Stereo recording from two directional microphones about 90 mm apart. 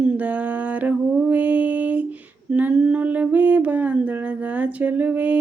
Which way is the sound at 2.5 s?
15° right (ahead or behind).